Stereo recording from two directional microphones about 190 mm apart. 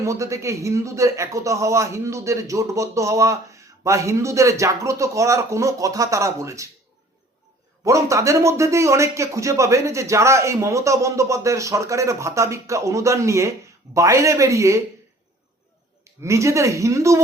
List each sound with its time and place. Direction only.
0.0 s speech: 15° right (ahead or behind)
7.9 s speech: 15° right (ahead or behind)
16.2 s speech: 15° right (ahead or behind)